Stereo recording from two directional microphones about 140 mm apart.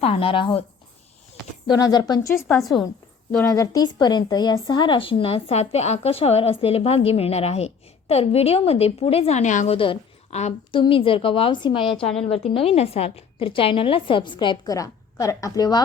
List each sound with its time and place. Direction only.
0.0 s a woman's voice: 40° left (ahead or behind)
1.6 s speech: 30° left (ahead or behind)
2.3 s a woman's voice: 20° left (ahead or behind)
2.6 s a woman's voice: centre (ahead or behind)
3.5 s speech: 25° left (ahead or behind); by 9.7 s 60° left (ahead or behind)
9.7 s a woman's voice: 40° left (ahead or behind)